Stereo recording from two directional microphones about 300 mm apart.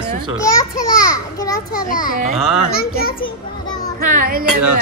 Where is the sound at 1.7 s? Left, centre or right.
Left.